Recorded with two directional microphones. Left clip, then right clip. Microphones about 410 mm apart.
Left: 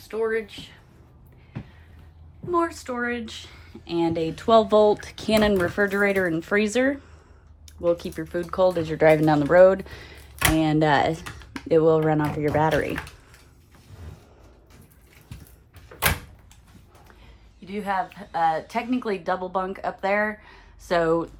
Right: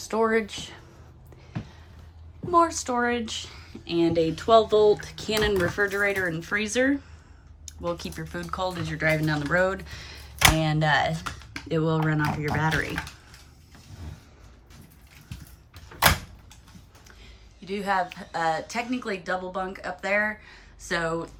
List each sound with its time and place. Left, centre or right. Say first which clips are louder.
0.1 s speech: right 2 dB; centre
2.5 s speech: right 3 dB; centre
17.7 s speech: right 1 dB; centre